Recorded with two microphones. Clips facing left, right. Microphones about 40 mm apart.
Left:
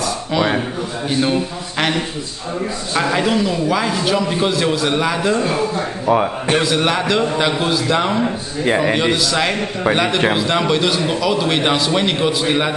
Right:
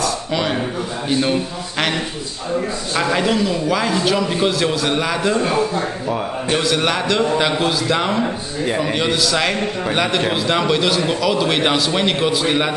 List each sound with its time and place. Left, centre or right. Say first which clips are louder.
0.0 s a sound: left 2 dB; centre
1.0 s a man's voice: left 1 dB; centre
6.0 s a man's voice: left 5 dB; left
6.6 s a man's voice: left 1 dB; centre
8.6 s a man's voice: left 4 dB; left
8.9 s a man's voice: left 1 dB; centre